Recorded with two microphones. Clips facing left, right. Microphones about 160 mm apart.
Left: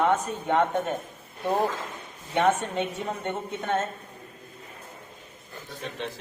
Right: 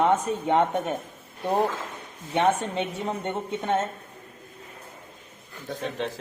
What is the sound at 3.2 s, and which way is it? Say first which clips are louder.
Speech: right 2 dB; 25° right (ahead or behind).